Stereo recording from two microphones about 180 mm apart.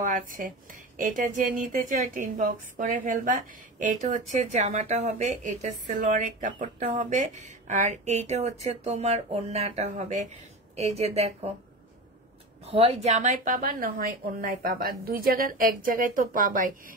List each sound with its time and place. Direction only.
0.0 s speech: 50° right (ahead or behind)
12.6 s speech: 35° right (ahead or behind); by 16.9 s 50° right (ahead or behind)